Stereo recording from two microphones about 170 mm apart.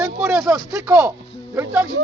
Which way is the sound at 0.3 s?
15° right (ahead or behind).